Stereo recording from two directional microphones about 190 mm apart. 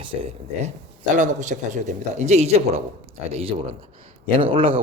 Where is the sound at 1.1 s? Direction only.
40° right (ahead or behind).